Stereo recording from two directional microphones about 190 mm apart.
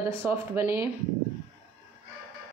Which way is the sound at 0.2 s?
15° right (ahead or behind).